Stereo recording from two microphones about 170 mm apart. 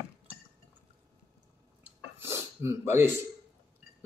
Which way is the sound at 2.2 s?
15° right (ahead or behind).